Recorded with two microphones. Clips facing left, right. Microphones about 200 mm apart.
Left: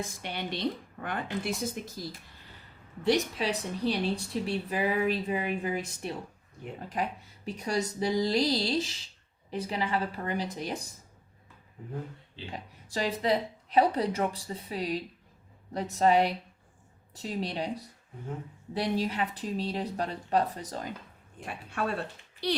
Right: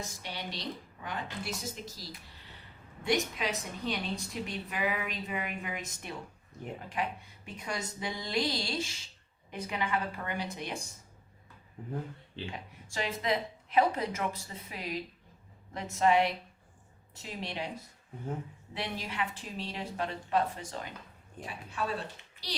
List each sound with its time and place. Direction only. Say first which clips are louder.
0.0 s a woman's voice: left 5 dB; 55° left (ahead or behind)
3.0 s a woman's voice: left 4 dB; 35° left (ahead or behind)
12.5 s a woman's voice: left 2 dB; 35° left (ahead or behind)
21.4 s a woman's voice: left 3 dB; 55° left (ahead or behind)